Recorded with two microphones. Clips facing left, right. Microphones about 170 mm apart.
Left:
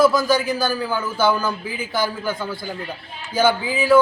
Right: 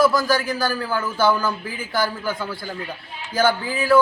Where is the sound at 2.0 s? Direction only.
20° left (ahead or behind).